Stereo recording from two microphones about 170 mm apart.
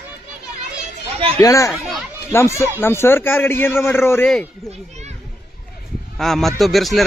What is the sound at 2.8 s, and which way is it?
Speech, 15° left (ahead or behind).